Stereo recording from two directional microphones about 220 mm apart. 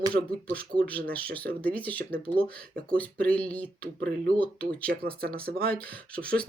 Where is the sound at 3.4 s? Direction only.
5° left (ahead or behind).